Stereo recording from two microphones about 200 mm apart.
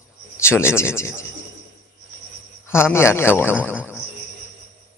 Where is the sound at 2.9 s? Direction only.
15° left (ahead or behind).